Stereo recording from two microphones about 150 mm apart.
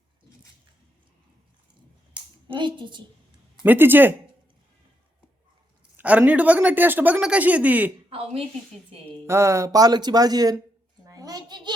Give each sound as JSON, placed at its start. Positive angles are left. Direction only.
{"t": 2.5, "sound": "a woman's voice", "side_deg": -35}
{"t": 3.6, "sound": "speech", "side_deg": -15}
{"t": 6.0, "sound": "speech", "side_deg": -10}
{"t": 8.1, "sound": "a woman's voice", "side_deg": -40}
{"t": 9.2, "sound": "speech", "side_deg": -20}
{"t": 11.0, "sound": "a sound", "side_deg": -25}